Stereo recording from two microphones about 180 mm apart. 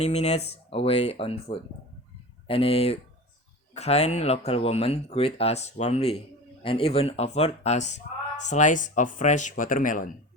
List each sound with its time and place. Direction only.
0.0 s speech: 35° left (ahead or behind)